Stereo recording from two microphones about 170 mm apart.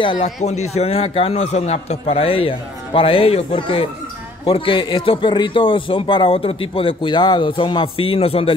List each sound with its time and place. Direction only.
0.0 s speech: 30° left (ahead or behind)
0.4 s a man's voice: 40° left (ahead or behind)